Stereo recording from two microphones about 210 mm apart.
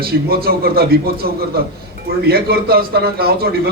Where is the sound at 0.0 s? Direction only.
45° right (ahead or behind).